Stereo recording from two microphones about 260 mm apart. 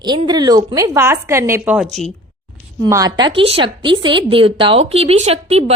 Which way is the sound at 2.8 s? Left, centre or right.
Centre.